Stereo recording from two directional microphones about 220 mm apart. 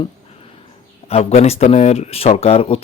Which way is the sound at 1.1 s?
30° left (ahead or behind).